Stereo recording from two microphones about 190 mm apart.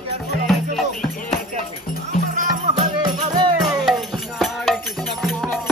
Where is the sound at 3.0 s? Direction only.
20° right (ahead or behind).